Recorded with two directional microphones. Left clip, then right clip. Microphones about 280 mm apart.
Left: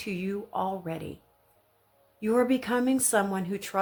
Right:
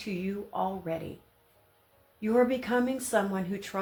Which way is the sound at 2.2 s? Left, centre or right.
Left.